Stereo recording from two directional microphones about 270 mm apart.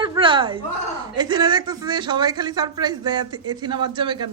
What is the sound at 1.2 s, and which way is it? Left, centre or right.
Speech, centre.